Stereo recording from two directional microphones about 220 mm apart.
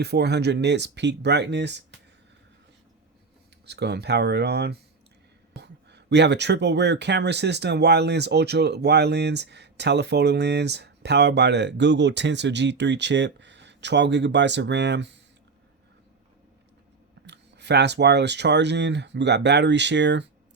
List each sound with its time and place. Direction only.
0.0 s speech: 50° right (ahead or behind)
3.7 s speech: 50° right (ahead or behind)
17.2 s speech: 50° right (ahead or behind)